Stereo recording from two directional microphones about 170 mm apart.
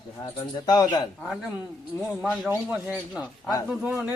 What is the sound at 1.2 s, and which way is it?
Speech, centre (ahead or behind).